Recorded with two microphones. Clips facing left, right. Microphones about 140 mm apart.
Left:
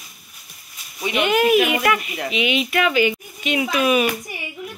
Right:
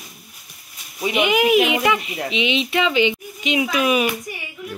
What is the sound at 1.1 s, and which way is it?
Speech, 15° right (ahead or behind).